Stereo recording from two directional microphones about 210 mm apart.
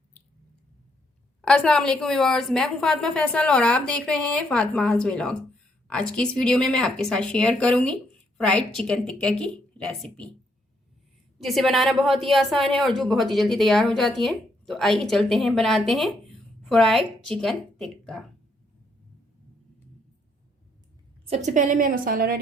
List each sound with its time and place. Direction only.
1.4 s a woman's voice: 5° left (ahead or behind)
11.4 s a woman's voice: centre (ahead or behind)
21.2 s a woman's voice: 35° right (ahead or behind)